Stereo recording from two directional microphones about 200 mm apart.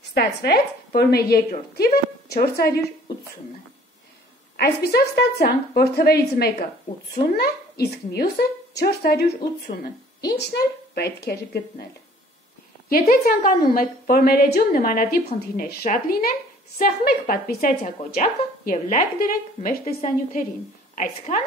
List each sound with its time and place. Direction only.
0.1 s a woman's voice: 55° left (ahead or behind)
4.6 s a woman's voice: 50° left (ahead or behind)
13.1 s a woman's voice: 45° left (ahead or behind)
20.9 s a woman's voice: 40° left (ahead or behind)